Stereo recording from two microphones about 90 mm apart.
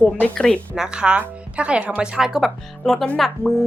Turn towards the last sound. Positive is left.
turn(degrees=0)  # may be behind; listen again after turning